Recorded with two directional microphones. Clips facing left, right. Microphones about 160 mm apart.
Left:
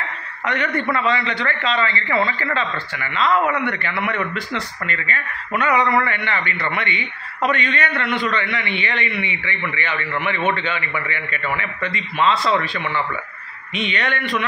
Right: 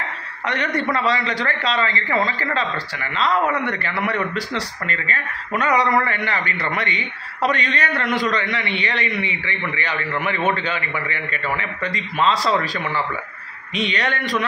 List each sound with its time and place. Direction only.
0.5 s speech: 35° right (ahead or behind)